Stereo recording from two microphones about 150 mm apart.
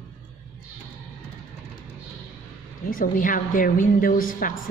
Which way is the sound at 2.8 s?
65° left (ahead or behind).